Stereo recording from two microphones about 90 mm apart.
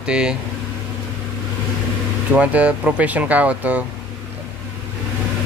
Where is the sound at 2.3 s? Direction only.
15° right (ahead or behind).